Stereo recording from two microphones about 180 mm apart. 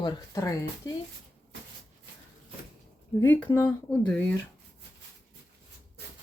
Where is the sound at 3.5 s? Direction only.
15° left (ahead or behind).